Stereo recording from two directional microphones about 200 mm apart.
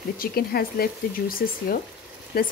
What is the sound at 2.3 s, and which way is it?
Speech, 50° left (ahead or behind).